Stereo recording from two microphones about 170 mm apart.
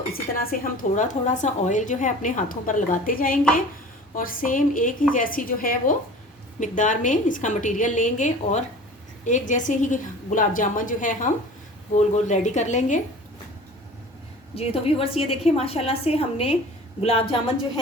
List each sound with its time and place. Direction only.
0.1 s a woman's voice: 55° left (ahead or behind)
14.5 s a woman's voice: 35° left (ahead or behind)